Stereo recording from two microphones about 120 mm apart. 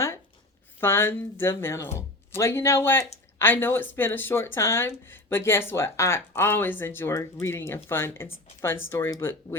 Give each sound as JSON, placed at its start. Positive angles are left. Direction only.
{"t": 0.8, "sound": "speech", "side_deg": 20}